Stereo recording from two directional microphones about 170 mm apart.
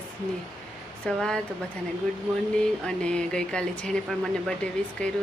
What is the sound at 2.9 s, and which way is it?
Speech, 5° left (ahead or behind).